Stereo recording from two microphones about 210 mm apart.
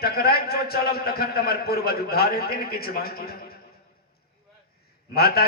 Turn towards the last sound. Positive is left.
turn(degrees=50)  # may be behind; listen again after turning